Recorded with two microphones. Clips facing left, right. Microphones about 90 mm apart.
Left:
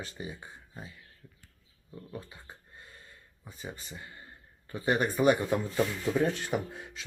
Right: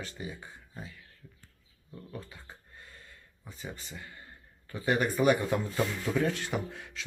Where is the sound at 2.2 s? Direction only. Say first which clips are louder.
Even; 20° left (ahead or behind).